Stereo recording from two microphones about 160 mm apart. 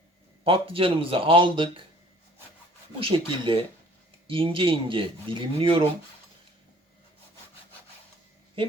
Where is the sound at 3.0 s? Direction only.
35° right (ahead or behind).